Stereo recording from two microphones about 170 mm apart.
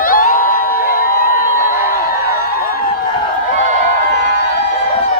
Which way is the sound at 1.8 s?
55° left (ahead or behind).